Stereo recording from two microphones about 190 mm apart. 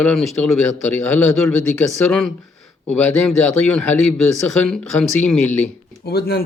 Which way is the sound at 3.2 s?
5° left (ahead or behind).